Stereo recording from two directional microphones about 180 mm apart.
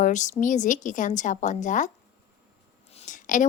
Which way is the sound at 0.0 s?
40° left (ahead or behind).